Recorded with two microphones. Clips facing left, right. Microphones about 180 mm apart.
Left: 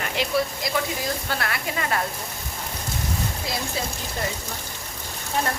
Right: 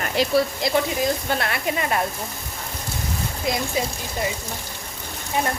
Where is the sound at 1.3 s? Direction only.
25° right (ahead or behind).